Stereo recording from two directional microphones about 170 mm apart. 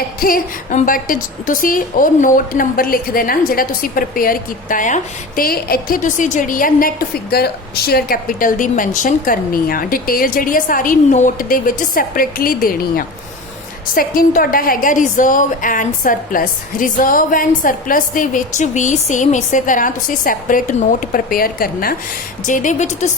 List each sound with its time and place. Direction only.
0.2 s a woman's voice: 55° left (ahead or behind)
5.4 s a woman's voice: 60° left (ahead or behind)
22.4 s a woman's voice: 50° left (ahead or behind)